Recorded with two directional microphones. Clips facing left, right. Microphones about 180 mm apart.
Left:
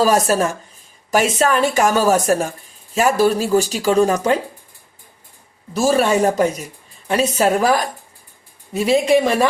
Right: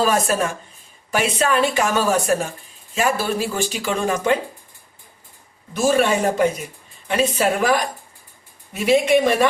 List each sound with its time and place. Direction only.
0.0 s speech: 40° left (ahead or behind)
5.7 s speech: 35° left (ahead or behind)
8.7 s speech: 35° left (ahead or behind)